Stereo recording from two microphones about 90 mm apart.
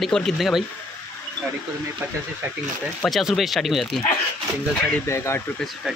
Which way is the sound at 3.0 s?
Centre (ahead or behind).